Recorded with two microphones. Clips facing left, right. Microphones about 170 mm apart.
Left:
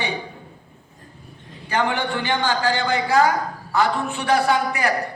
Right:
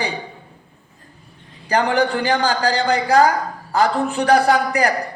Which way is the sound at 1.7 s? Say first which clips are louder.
Right 5 dB; 35° right (ahead or behind).